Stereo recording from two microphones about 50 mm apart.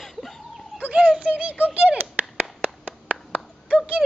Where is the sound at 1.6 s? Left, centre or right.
Right.